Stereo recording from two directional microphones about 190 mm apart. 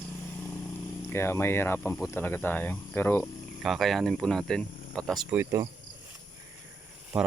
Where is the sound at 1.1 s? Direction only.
10° left (ahead or behind).